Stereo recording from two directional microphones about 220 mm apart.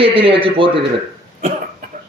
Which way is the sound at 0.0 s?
25° right (ahead or behind).